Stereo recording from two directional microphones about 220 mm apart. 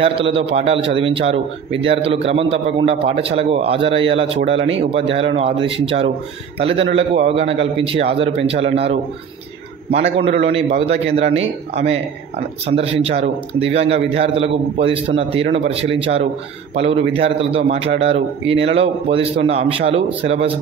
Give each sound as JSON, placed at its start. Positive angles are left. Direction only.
{"t": 0.0, "sound": "a man's voice", "side_deg": -25}
{"t": 9.9, "sound": "a man's voice", "side_deg": -25}